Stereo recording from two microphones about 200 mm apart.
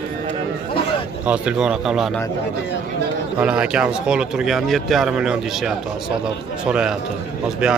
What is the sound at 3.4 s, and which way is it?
Speech, 5° right (ahead or behind).